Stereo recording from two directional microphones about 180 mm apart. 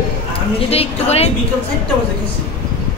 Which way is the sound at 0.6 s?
35° left (ahead or behind).